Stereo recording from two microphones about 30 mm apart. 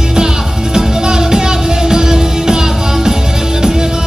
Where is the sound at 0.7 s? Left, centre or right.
Centre.